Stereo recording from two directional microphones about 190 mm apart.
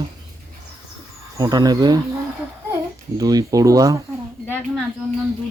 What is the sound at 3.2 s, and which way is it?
Speech, 20° right (ahead or behind).